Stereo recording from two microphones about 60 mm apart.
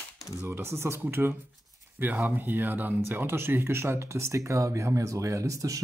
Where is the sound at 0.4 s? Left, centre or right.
Right.